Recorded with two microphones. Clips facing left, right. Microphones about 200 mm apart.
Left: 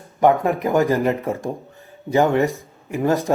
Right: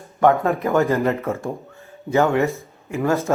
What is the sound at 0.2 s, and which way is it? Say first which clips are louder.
A man's voice: even; 15° left (ahead or behind).